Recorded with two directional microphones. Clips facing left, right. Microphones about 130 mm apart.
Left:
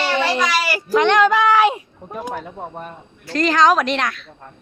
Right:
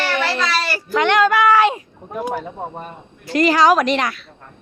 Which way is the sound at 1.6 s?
15° left (ahead or behind).